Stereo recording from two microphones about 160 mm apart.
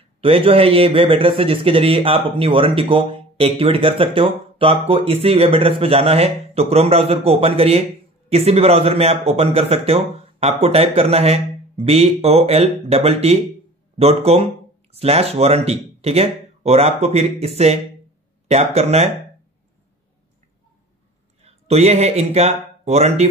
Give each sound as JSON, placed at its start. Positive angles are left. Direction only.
{"t": 0.2, "sound": "a man's voice", "side_deg": -35}
{"t": 18.5, "sound": "a man's voice", "side_deg": -40}
{"t": 21.4, "sound": "speech", "side_deg": -40}